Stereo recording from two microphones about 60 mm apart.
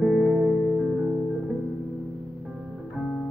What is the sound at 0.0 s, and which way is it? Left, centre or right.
Music, centre.